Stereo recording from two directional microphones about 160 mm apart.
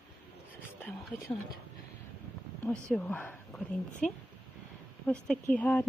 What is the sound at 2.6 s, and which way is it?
Speech, 10° left (ahead or behind).